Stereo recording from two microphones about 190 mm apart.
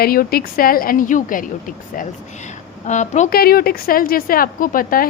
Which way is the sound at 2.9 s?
40° left (ahead or behind).